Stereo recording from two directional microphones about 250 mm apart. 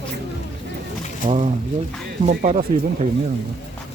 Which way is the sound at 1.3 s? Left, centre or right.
Right.